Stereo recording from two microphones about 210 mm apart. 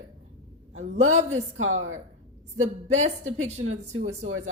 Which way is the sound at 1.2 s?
30° right (ahead or behind).